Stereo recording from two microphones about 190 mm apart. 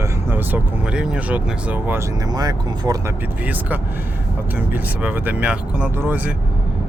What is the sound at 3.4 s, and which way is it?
Speech, 10° right (ahead or behind).